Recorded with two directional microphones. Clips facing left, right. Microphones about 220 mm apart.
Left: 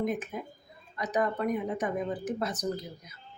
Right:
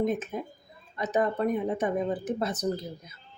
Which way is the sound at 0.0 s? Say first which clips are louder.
Right 3 dB; 25° right (ahead or behind).